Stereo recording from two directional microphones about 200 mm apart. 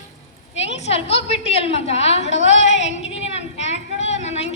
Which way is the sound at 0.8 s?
30° left (ahead or behind).